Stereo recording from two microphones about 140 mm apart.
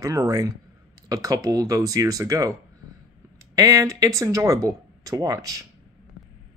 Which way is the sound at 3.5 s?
25° right (ahead or behind).